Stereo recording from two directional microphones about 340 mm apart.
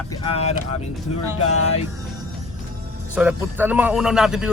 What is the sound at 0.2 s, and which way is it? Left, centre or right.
Speech, centre.